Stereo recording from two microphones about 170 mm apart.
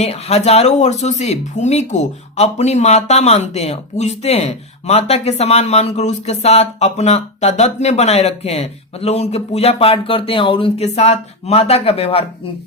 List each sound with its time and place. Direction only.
0.0 s speech: 40° left (ahead or behind)